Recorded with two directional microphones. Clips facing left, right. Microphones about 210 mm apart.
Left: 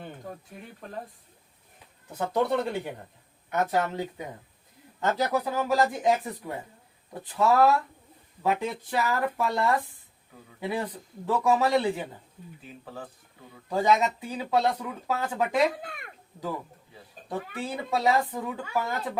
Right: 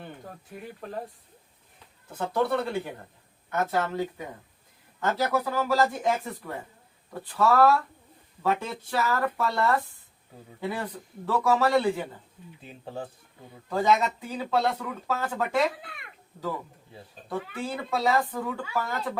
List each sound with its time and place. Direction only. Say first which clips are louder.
2.1 s speech: left 1 dB; 15° left (ahead or behind)
12.6 s speech: right 4 dB; 25° right (ahead or behind)
13.7 s speech: even; 15° left (ahead or behind)
15.8 s speech: left 5 dB; 45° left (ahead or behind)
17.2 s speech: right 1 dB; 15° left (ahead or behind)